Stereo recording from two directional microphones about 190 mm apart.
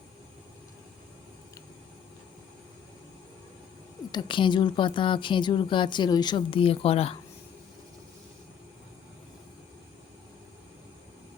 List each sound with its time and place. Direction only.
4.1 s speech: 25° left (ahead or behind)